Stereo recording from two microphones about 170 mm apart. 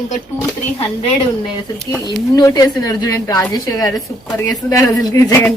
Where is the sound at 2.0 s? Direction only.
20° left (ahead or behind).